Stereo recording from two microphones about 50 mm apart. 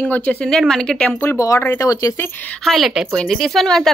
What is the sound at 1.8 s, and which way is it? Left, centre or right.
Speech, left.